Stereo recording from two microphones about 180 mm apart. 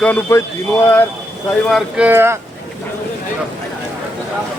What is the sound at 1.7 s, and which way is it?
Speech, 5° right (ahead or behind).